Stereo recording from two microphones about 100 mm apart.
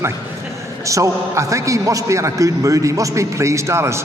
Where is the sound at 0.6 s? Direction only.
30° right (ahead or behind).